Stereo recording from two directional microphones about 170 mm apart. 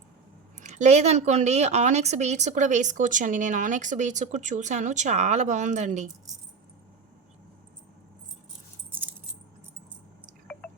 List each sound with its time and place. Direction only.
0.6 s speech: 45° right (ahead or behind)